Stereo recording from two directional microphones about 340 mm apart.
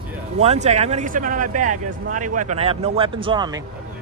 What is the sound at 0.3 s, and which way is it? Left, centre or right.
Speech, centre.